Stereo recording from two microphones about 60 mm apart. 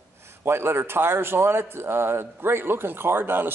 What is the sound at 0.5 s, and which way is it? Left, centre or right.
A man's voice, right.